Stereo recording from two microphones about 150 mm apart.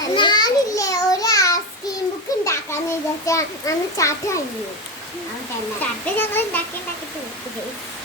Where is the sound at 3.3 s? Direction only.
20° left (ahead or behind).